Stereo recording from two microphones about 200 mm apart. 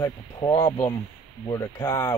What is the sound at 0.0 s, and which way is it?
A man's voice, 15° left (ahead or behind).